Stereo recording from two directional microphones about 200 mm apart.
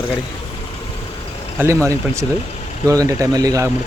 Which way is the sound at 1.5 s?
15° right (ahead or behind).